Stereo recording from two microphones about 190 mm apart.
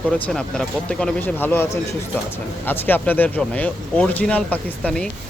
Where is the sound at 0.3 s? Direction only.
5° left (ahead or behind).